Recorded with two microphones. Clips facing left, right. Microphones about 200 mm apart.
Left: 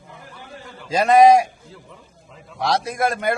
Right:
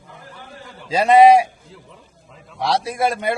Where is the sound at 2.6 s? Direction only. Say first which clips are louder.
Right 1 dB; 30° right (ahead or behind).